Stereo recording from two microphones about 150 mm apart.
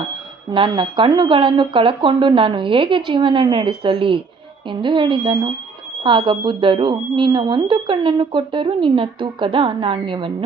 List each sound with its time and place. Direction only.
0.5 s speech: 35° right (ahead or behind)